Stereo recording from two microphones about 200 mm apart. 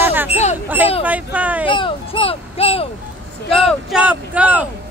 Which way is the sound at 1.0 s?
5° right (ahead or behind).